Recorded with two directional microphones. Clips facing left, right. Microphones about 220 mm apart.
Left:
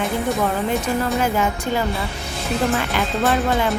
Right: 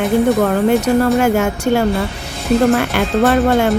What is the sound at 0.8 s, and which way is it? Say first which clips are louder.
Speech: right 8 dB; 70° right (ahead or behind).